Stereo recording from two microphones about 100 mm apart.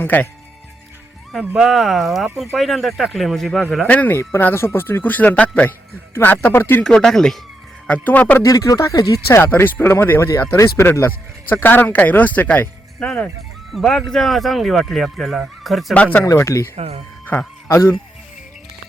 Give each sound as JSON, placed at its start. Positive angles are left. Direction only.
{"t": 0.0, "sound": "speech", "side_deg": 15}
{"t": 1.3, "sound": "speech", "side_deg": -5}
{"t": 3.8, "sound": "speech", "side_deg": 15}
{"t": 6.8, "sound": "speech", "side_deg": 5}
{"t": 8.4, "sound": "speech", "side_deg": 35}
{"t": 9.4, "sound": "speech", "side_deg": 20}
{"t": 13.7, "sound": "speech", "side_deg": 0}
{"t": 16.2, "sound": "speech", "side_deg": 30}
{"t": 16.7, "sound": "speech", "side_deg": -90}
{"t": 17.7, "sound": "speech", "side_deg": 30}